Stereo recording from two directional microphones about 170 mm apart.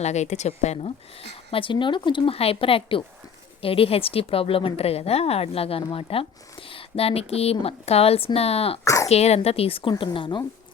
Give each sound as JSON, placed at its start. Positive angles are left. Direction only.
{"t": 0.0, "sound": "a woman's voice", "side_deg": 40}
{"t": 8.8, "sound": "a woman's voice", "side_deg": 20}
{"t": 9.0, "sound": "a woman's voice", "side_deg": 40}